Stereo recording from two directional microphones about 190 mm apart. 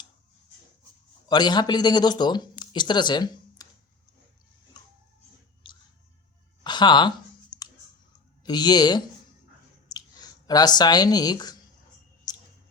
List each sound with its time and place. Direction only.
1.3 s speech: 20° left (ahead or behind)
6.7 s speech: 25° left (ahead or behind)
7.5 s clicking: 20° left (ahead or behind)
8.4 s speech: 20° left (ahead or behind)